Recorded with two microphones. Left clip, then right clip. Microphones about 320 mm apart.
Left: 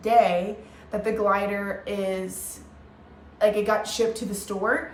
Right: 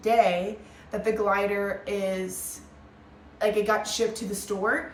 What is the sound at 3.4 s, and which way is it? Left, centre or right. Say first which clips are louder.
Speech: left 2 dB; centre.